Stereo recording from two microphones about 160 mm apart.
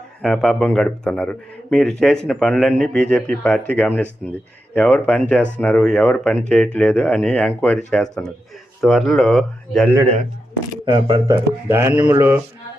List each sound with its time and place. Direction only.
0.2 s speech: 5° left (ahead or behind)
10.8 s speech: 30° right (ahead or behind)
11.7 s mantra: 15° right (ahead or behind)